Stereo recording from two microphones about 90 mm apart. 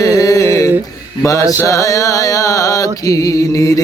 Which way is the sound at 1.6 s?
35° left (ahead or behind).